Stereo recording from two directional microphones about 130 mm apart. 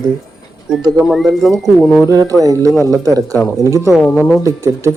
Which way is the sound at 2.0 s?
25° right (ahead or behind).